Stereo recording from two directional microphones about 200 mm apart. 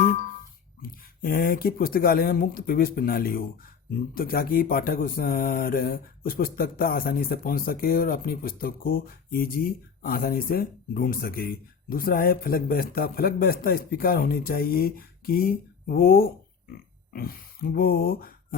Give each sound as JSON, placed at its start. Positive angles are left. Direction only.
{"t": 0.0, "sound": "music", "side_deg": 45}
{"t": 0.8, "sound": "speech", "side_deg": 45}